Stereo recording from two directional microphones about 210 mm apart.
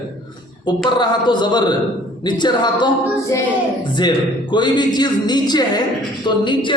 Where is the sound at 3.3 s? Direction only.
15° left (ahead or behind).